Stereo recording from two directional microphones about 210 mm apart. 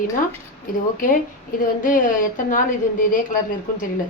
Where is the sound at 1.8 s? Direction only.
40° left (ahead or behind).